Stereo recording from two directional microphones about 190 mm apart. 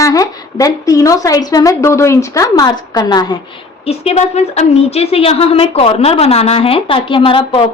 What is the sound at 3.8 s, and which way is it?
A woman's voice, 30° left (ahead or behind).